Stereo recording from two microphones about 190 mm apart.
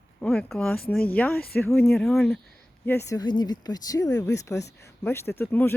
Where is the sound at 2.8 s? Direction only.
15° left (ahead or behind).